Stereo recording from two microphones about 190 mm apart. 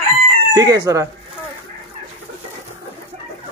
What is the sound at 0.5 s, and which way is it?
Speech, 15° right (ahead or behind).